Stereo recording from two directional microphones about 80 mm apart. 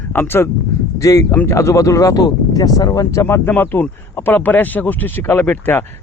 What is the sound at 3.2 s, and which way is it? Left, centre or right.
Speech, left.